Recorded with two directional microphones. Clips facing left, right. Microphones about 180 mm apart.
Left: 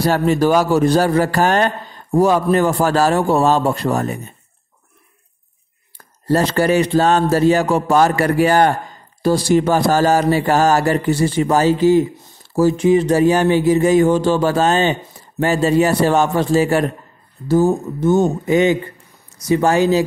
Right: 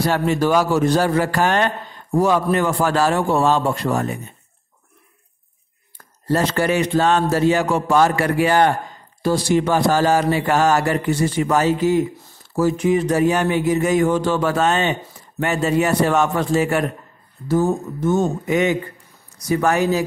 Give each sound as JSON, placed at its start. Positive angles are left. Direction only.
{"t": 0.0, "sound": "speech", "side_deg": 40}
{"t": 5.9, "sound": "speech", "side_deg": 35}
{"t": 18.0, "sound": "speech", "side_deg": 25}